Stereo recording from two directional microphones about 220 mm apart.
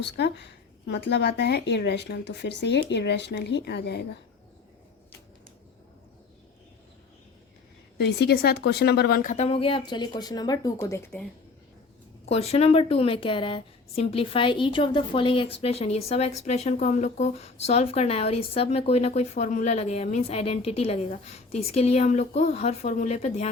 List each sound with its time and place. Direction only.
0.0 s speech: 50° left (ahead or behind)
7.9 s speech: 50° left (ahead or behind); by 11.2 s 10° left (ahead or behind)
12.2 s speech: 30° left (ahead or behind)